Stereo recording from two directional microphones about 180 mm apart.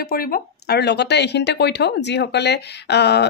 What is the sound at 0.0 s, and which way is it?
A woman's voice, 55° left (ahead or behind).